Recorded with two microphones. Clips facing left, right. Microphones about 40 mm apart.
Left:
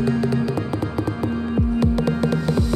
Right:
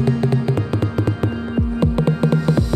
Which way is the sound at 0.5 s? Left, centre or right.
Right.